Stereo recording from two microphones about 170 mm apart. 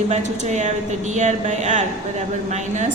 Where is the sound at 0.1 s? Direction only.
45° right (ahead or behind).